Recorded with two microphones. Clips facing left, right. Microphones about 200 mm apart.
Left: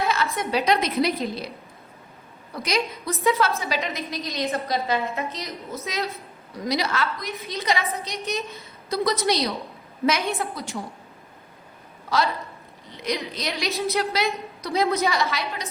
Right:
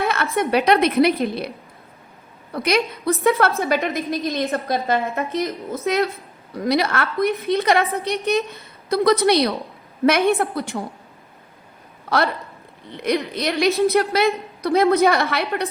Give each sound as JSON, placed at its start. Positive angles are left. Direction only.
{"t": 0.0, "sound": "a sound", "side_deg": -60}
{"t": 0.3, "sound": "a woman's voice", "side_deg": -60}
{"t": 2.5, "sound": "a woman's voice", "side_deg": -60}
{"t": 12.0, "sound": "a woman's voice", "side_deg": -60}